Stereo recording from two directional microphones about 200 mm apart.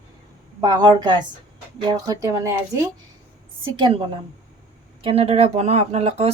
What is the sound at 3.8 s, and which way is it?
Speech, 25° right (ahead or behind).